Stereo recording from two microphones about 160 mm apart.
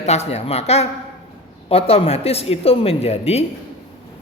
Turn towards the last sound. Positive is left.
turn(degrees=40)  # may be behind; listen again after turning